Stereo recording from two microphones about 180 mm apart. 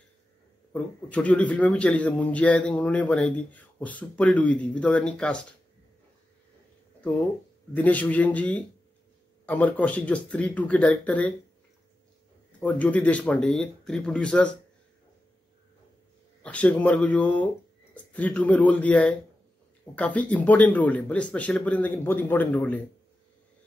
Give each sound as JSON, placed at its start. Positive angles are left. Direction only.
{"t": 0.7, "sound": "a man's voice", "side_deg": 10}
{"t": 7.7, "sound": "a man's voice", "side_deg": 10}
{"t": 12.5, "sound": "a man's voice", "side_deg": 10}
{"t": 16.4, "sound": "a man's voice", "side_deg": 10}